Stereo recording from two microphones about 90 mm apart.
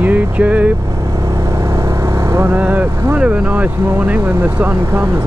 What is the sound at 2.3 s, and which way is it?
Speech, 20° right (ahead or behind).